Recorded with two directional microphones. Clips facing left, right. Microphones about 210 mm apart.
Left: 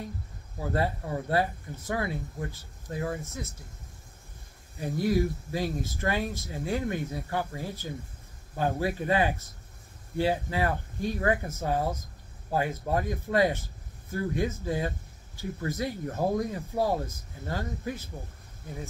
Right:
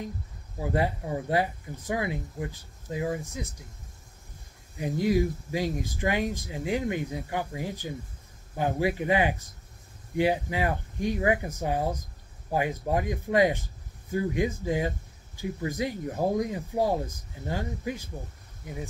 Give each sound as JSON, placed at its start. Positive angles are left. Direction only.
{"t": 0.6, "sound": "speech", "side_deg": -15}
{"t": 4.7, "sound": "speech", "side_deg": -15}